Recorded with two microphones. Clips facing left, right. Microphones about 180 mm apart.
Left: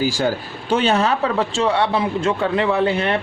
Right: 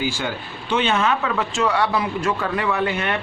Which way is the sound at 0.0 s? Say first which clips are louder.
Left 6 dB; 40° left (ahead or behind).